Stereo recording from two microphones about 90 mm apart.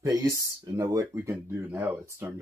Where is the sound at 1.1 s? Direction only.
25° right (ahead or behind).